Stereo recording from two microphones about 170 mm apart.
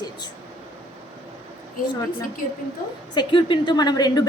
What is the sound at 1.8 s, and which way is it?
Speech, 55° left (ahead or behind).